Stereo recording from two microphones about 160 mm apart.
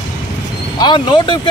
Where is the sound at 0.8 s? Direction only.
30° left (ahead or behind).